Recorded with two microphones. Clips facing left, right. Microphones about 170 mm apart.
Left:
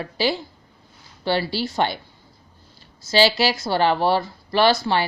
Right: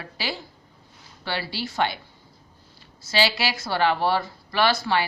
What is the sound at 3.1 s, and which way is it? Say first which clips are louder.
Speech: left 6 dB; 35° left (ahead or behind).